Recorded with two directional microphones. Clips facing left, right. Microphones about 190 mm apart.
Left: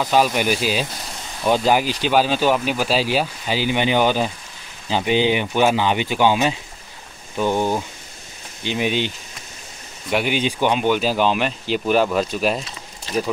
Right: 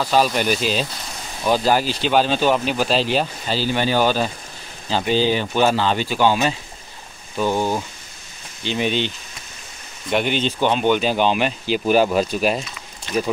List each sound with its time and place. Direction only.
0.0 s speech: 15° left (ahead or behind)
7.5 s speech: 15° left (ahead or behind); by 12.6 s centre (ahead or behind)